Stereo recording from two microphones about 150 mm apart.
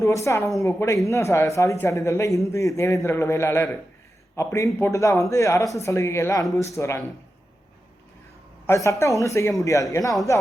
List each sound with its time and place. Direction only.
0.0 s speech: 20° left (ahead or behind)
8.6 s speech: 20° left (ahead or behind)